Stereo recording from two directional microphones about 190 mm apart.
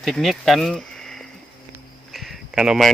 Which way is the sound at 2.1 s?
Centre (ahead or behind).